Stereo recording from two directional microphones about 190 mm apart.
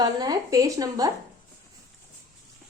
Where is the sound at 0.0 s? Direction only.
20° right (ahead or behind).